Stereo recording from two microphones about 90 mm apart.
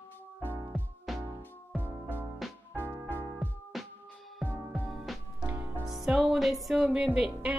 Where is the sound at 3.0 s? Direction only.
20° left (ahead or behind).